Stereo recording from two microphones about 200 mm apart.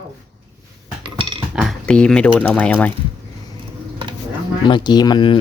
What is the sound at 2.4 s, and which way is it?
Speech, 5° left (ahead or behind).